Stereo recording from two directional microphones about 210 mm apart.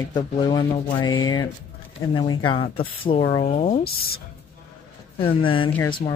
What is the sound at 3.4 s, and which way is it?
Speech, 40° left (ahead or behind).